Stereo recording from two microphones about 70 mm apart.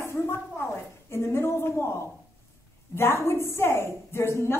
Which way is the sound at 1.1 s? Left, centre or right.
Left.